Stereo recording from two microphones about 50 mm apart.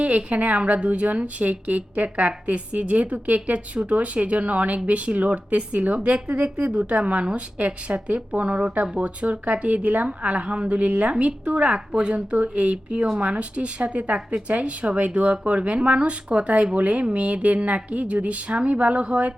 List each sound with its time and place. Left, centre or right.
0.0 s speech: right